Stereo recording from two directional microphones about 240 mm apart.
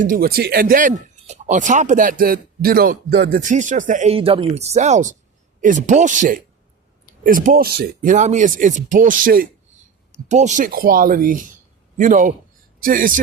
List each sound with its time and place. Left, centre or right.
0.0 s speech: right